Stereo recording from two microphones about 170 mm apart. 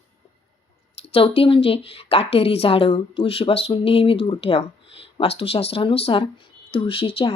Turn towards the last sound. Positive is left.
turn(degrees=30)  # may be behind; listen again after turning